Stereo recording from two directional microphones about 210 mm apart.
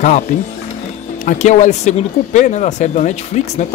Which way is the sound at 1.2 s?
35° left (ahead or behind).